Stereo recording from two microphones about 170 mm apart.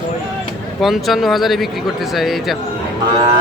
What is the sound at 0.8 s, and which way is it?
Speech, centre (ahead or behind).